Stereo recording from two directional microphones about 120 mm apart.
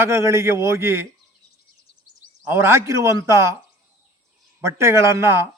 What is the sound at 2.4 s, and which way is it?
A man's voice, 20° right (ahead or behind).